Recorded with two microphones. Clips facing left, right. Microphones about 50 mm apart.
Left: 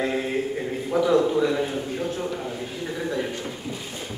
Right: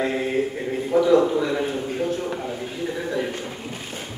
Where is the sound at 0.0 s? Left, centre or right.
Centre.